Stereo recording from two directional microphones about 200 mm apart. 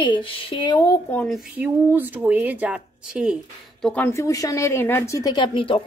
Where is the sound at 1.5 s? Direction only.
10° right (ahead or behind); by 5.8 s 25° left (ahead or behind).